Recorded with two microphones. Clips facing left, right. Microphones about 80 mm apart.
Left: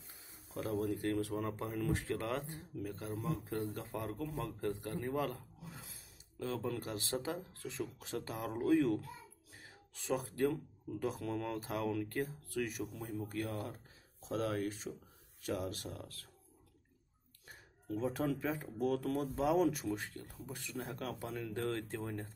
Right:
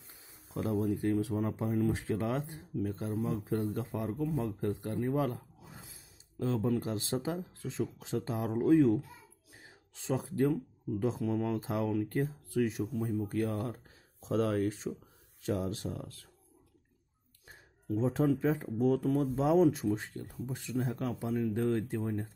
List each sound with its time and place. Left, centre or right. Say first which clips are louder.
0.6 s speech: right 5 dB; right
9.5 s a sound: right 1 dB; right
11.0 s speech: right 6 dB; right
17.5 s speech: right 6 dB; right